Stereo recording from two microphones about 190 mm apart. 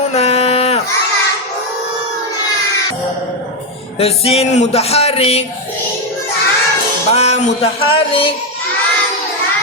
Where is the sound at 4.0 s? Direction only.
30° left (ahead or behind).